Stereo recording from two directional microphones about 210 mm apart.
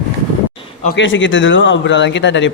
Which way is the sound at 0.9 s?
65° left (ahead or behind).